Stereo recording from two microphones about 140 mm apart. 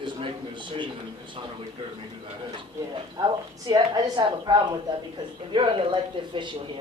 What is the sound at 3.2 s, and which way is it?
Speech, 35° right (ahead or behind).